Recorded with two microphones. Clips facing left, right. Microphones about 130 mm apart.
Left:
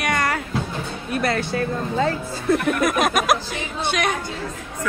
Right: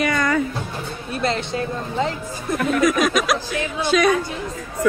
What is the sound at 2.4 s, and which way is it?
Speech, 60° left (ahead or behind).